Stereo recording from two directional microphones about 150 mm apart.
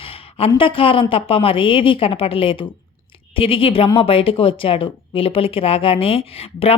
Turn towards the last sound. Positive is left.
turn(degrees=40)  # may be behind; listen again after turning